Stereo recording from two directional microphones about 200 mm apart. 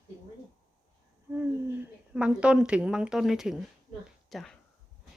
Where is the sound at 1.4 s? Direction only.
5° right (ahead or behind).